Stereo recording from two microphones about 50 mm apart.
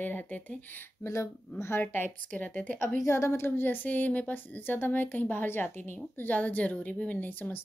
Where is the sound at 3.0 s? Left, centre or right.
Left.